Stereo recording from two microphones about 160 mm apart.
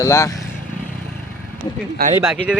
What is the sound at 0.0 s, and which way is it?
Speech, 20° left (ahead or behind).